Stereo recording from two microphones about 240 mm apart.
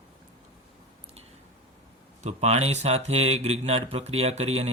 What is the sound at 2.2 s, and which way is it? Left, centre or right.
Speech, right.